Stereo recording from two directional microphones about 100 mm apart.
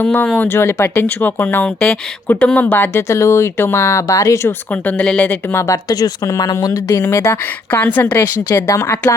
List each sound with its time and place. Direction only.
0.0 s speech: 20° left (ahead or behind)
4.7 s speech: 15° left (ahead or behind)
8.5 s speech: 30° left (ahead or behind)